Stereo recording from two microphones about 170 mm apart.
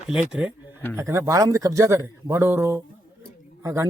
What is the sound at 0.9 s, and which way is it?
Speech, 15° right (ahead or behind).